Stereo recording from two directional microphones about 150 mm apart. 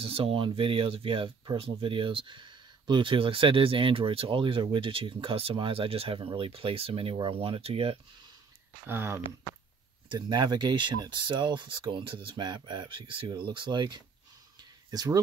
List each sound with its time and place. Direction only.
0.0 s speech: 40° right (ahead or behind)
8.8 s speech: 15° right (ahead or behind)
10.0 s speech: 25° right (ahead or behind)
14.6 s a sound: 25° right (ahead or behind)